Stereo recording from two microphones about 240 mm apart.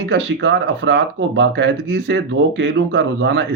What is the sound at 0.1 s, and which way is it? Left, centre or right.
Speech, right.